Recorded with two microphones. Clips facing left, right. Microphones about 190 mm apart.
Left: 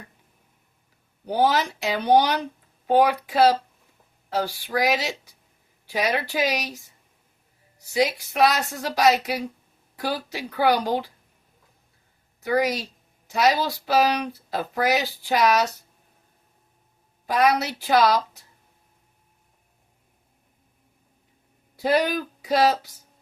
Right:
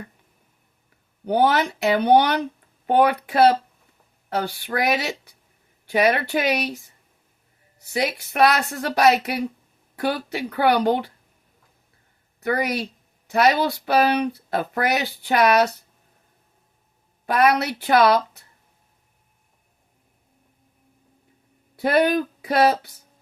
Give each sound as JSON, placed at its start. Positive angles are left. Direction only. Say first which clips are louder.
{"t": 1.3, "sound": "speech", "louder": "right 2 dB", "side_deg": -60}
{"t": 7.8, "sound": "speech", "louder": "left 2 dB", "side_deg": -60}
{"t": 12.4, "sound": "speech", "louder": "left 1 dB", "side_deg": -60}
{"t": 17.2, "sound": "speech", "louder": "right 2 dB", "side_deg": -60}
{"t": 21.8, "sound": "speech", "louder": "right 3 dB", "side_deg": -60}